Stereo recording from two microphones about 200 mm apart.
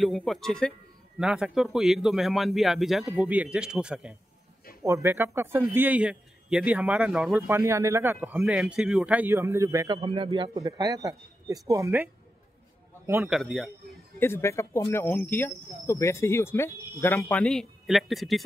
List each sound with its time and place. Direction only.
0.0 s a man's voice: centre (ahead or behind)
7.4 s a man's voice: 15° right (ahead or behind)
9.9 s a man's voice: 30° right (ahead or behind)
13.3 s speech: centre (ahead or behind)
14.2 s speech: 10° left (ahead or behind)